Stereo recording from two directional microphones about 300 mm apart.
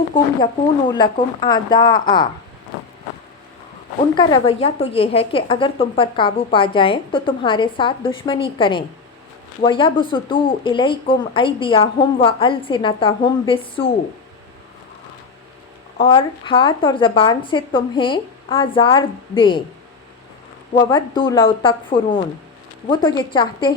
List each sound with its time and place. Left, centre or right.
0.1 s a woman's voice: centre
4.1 s a woman's voice: centre
16.0 s a woman's voice: centre
20.8 s a woman's voice: centre